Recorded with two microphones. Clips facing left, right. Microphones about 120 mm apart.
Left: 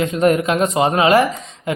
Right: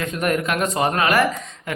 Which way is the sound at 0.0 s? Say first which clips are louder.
Left 7 dB; 25° left (ahead or behind).